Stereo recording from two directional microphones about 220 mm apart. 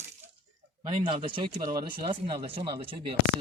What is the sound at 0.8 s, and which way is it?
Speech, 20° right (ahead or behind).